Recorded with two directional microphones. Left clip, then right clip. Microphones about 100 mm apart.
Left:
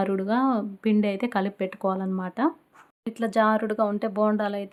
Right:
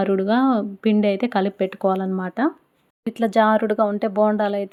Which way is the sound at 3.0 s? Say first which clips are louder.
Right 5 dB; 35° right (ahead or behind).